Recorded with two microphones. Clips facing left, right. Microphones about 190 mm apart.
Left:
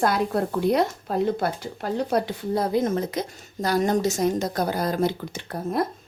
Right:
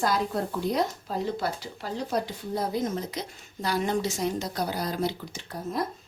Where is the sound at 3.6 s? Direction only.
45° left (ahead or behind).